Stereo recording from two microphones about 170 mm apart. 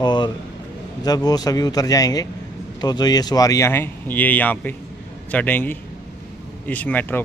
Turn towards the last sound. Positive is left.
turn(degrees=10)  # may be behind; listen again after turning